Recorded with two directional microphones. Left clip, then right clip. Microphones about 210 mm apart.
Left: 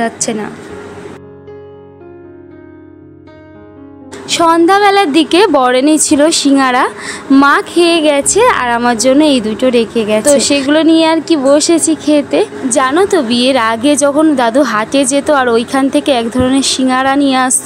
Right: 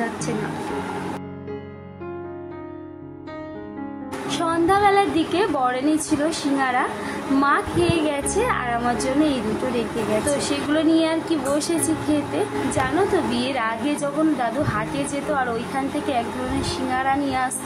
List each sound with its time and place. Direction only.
4.3 s a woman's voice: 50° left (ahead or behind)